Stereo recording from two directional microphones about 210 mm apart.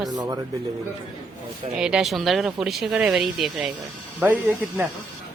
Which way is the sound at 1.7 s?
5° right (ahead or behind).